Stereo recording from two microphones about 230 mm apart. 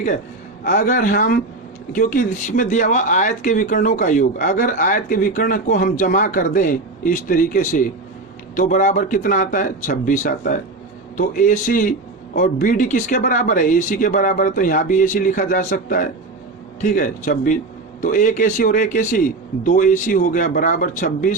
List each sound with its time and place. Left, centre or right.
0.6 s speech: left